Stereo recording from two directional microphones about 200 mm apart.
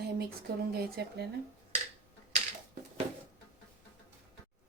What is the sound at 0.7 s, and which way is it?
Speech, 50° right (ahead or behind).